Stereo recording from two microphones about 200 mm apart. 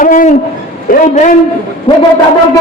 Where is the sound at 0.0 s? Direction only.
40° left (ahead or behind).